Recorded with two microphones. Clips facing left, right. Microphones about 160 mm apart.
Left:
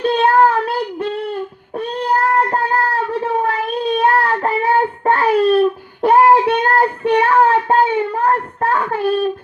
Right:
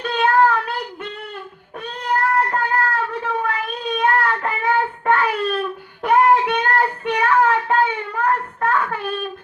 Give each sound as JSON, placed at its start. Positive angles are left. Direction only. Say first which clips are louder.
{"t": 0.0, "sound": "child singing", "louder": "left 4 dB", "side_deg": 30}